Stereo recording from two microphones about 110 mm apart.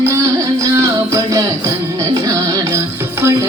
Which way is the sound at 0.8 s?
30° right (ahead or behind).